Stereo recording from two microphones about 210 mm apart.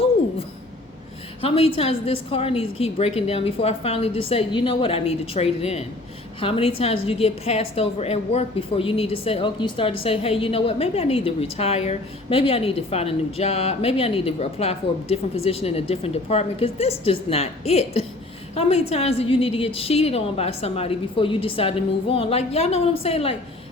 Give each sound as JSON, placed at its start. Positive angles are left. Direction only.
{"t": 1.4, "sound": "a woman's voice", "side_deg": 30}